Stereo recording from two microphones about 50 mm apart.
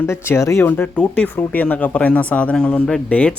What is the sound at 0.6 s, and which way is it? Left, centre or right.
Speech, left.